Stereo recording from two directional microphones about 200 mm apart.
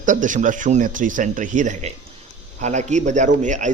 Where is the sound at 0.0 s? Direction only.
40° right (ahead or behind).